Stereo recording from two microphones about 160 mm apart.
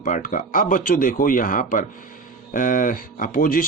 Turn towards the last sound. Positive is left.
turn(degrees=60)  # may be behind; listen again after turning